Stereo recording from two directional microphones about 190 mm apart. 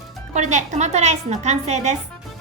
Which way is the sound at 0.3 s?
35° right (ahead or behind).